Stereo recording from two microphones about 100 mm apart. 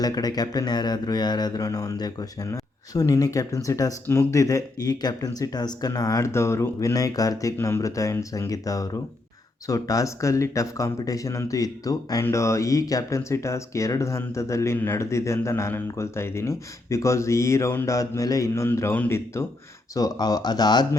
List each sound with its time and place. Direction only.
0.0 s speech: 40° left (ahead or behind)
20.0 s speech: 40° left (ahead or behind)